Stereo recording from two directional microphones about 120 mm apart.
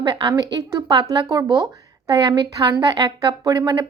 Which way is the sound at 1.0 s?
25° right (ahead or behind).